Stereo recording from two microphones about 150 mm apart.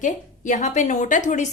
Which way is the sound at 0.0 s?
55° left (ahead or behind).